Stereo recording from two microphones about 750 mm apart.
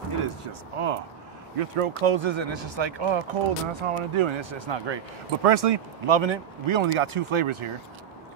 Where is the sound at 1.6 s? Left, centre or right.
Right.